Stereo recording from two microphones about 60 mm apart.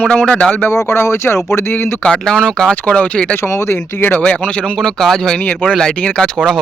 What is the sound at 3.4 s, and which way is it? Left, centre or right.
Speech, left.